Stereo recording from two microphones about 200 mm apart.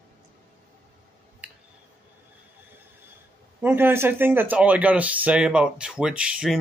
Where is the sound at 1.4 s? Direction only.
5° right (ahead or behind).